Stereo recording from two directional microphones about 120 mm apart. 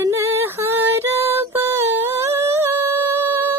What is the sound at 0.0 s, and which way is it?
Female singing, 20° right (ahead or behind).